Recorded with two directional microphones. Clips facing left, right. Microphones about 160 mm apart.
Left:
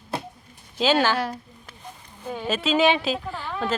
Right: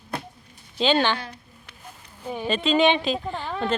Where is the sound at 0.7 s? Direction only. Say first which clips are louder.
Left 1 dB; 5° left (ahead or behind).